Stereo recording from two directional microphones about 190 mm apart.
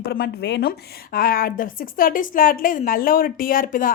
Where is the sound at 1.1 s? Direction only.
50° left (ahead or behind).